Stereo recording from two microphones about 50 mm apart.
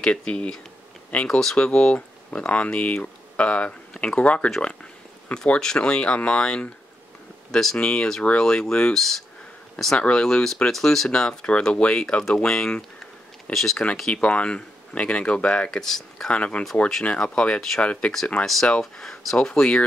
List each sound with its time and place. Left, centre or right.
0.0 s speech: left
5.3 s speech: centre
7.7 s speech: centre
8.9 s speech: centre
9.9 s speech: left
10.2 s speech: centre
13.5 s speech: centre
14.1 s speech: left
15.8 s speech: centre
16.3 s speech: left
18.4 s speech: centre